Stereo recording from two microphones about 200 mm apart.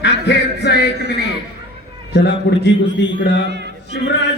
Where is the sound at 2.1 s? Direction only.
60° left (ahead or behind).